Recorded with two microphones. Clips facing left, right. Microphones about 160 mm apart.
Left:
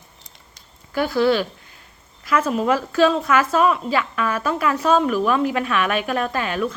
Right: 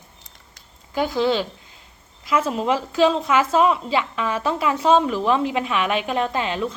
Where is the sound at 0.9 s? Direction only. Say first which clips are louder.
Left 2 dB; 20° right (ahead or behind).